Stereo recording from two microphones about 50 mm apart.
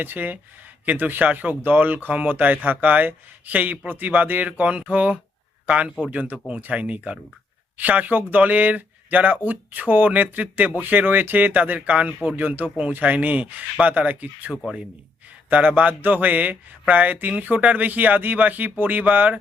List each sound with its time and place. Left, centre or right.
0.0 s speech: right
12.4 s speech: right
15.5 s speech: right